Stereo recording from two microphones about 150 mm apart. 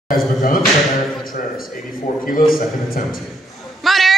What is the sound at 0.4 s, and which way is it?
A man's voice, 65° left (ahead or behind).